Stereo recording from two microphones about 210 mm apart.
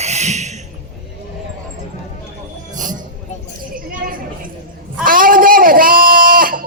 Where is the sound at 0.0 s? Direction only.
30° right (ahead or behind).